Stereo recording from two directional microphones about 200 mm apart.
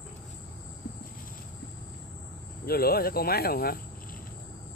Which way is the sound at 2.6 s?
50° left (ahead or behind).